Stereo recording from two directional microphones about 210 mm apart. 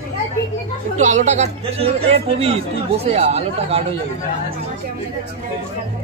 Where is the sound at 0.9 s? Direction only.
35° right (ahead or behind).